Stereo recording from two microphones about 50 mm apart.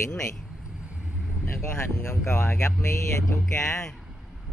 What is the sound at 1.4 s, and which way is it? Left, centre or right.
Vehicle, left.